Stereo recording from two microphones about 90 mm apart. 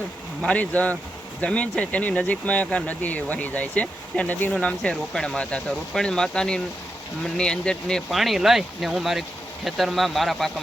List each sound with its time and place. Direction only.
0.4 s speech: 15° left (ahead or behind)
4.5 s speech: 10° left (ahead or behind)